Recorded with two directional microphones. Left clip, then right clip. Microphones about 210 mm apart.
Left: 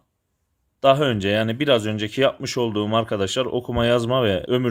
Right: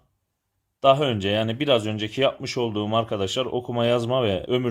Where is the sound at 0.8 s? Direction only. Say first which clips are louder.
Left 1 dB; 25° left (ahead or behind).